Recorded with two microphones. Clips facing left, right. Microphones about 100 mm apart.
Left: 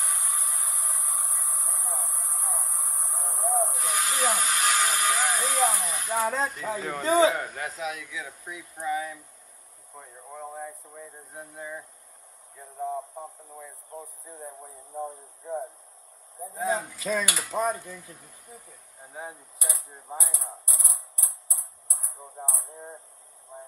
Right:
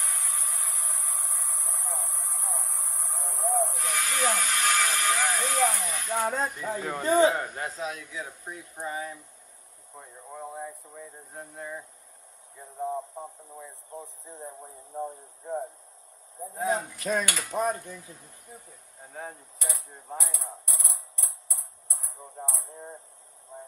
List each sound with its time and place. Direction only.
0.0 s a sound: 20° left (ahead or behind)
3.6 s speech: 20° left (ahead or behind)
6.4 s speech: 10° right (ahead or behind)
7.5 s speech: 30° right (ahead or behind)
9.9 s a sound: 5° right (ahead or behind)
14.5 s speech: centre (ahead or behind)
16.3 s speech: centre (ahead or behind)
18.9 s mechanisms: 5° left (ahead or behind)